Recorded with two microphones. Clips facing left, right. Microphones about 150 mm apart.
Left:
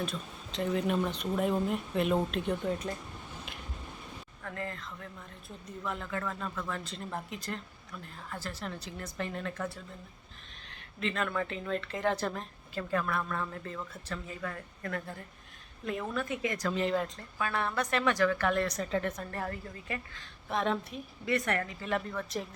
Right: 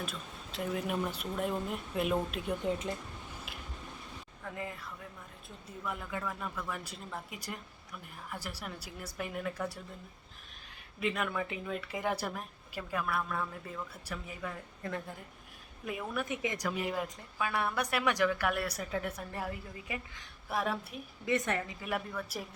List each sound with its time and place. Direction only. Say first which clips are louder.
0.0 s speech: left 4 dB; 5° right (ahead or behind)
2.6 s speech: even; 20° right (ahead or behind)
4.4 s a woman's voice: left 2 dB; 10° right (ahead or behind)
21.2 s a woman's voice: left 1 dB; 20° right (ahead or behind)